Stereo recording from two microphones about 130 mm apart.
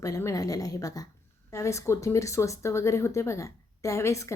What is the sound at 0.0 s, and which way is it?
Speech, 25° left (ahead or behind).